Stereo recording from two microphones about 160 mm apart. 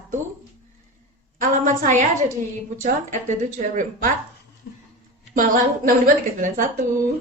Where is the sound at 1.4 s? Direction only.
55° right (ahead or behind).